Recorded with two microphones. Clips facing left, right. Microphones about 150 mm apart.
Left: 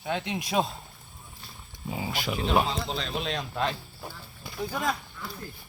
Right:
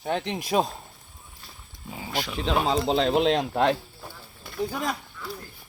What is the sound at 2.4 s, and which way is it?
Speech, 90° right.